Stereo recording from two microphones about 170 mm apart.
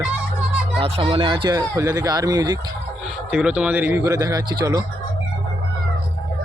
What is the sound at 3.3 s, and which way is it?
A man's voice, 5° right (ahead or behind).